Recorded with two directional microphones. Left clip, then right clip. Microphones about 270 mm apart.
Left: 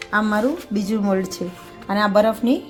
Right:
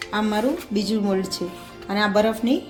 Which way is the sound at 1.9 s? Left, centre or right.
Left.